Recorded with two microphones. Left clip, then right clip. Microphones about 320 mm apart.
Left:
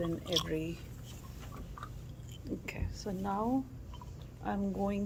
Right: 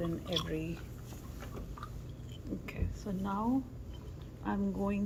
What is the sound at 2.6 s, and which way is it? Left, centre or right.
Speech, left.